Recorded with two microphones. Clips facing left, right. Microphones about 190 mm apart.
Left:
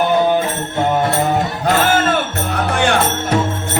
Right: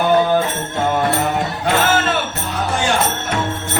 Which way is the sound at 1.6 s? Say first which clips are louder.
Left 1 dB; 50° left (ahead or behind).